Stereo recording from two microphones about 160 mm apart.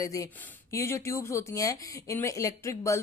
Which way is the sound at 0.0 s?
20° left (ahead or behind).